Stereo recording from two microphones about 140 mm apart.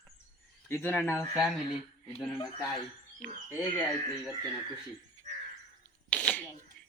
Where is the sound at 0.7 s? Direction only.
15° left (ahead or behind).